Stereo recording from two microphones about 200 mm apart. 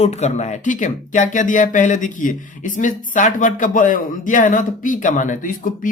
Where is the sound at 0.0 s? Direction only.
35° left (ahead or behind).